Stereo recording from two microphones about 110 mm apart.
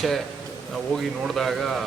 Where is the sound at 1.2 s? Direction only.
Centre (ahead or behind).